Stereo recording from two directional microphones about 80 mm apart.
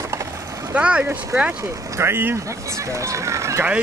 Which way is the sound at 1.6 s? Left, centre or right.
Right.